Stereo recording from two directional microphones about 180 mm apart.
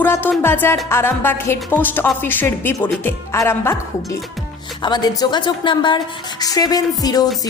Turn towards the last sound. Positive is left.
turn(degrees=20)  # may be behind; listen again after turning